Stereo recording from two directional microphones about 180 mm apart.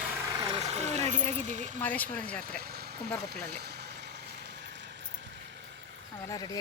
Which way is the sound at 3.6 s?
65° right (ahead or behind).